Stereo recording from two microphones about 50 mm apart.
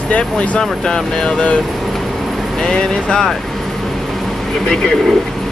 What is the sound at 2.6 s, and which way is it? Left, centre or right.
Speech, centre.